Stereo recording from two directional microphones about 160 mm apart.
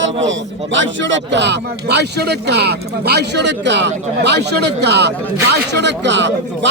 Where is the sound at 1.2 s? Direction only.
90° right.